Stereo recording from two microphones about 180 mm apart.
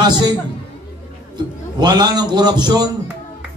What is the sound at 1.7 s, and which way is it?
A man's voice, 25° right (ahead or behind).